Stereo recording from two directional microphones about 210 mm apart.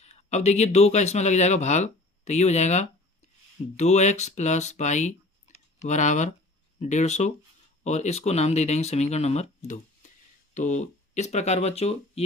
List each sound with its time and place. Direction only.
0.0 s speech: 30° left (ahead or behind)